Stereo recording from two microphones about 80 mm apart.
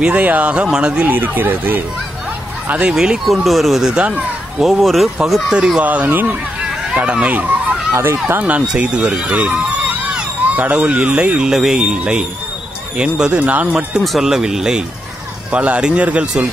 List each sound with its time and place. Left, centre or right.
0.0 s a man's voice: centre
1.1 s speech: right
2.9 s speech: centre
5.8 s speech: centre
7.9 s a man's voice: right
14.0 s a man's voice: centre